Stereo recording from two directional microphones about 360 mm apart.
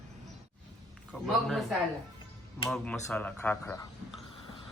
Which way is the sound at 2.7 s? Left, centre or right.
Centre.